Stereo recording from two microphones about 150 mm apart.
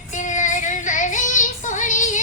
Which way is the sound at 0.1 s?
55° left (ahead or behind).